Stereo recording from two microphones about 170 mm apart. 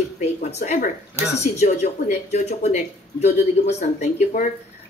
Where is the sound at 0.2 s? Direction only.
40° left (ahead or behind).